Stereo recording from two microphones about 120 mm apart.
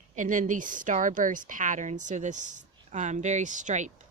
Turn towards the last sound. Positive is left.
turn(degrees=-90)